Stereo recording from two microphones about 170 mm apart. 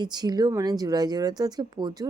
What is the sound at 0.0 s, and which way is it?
Speech, 25° right (ahead or behind).